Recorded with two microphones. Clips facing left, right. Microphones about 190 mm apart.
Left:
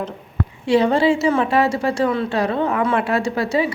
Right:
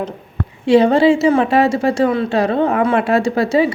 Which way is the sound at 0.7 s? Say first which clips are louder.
Right 5 dB; 25° right (ahead or behind).